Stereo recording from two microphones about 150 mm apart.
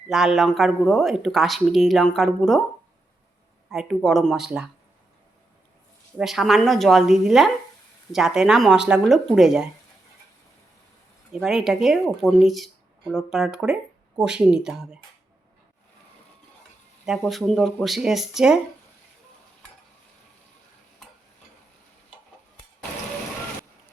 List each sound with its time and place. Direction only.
0.1 s speech: 5° right (ahead or behind)
3.7 s speech: centre (ahead or behind)
6.1 s speech: centre (ahead or behind)
11.3 s speech: 5° right (ahead or behind)
17.1 s speech: centre (ahead or behind)